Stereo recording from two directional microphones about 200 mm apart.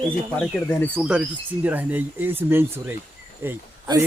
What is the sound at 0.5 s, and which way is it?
Speech, 10° left (ahead or behind).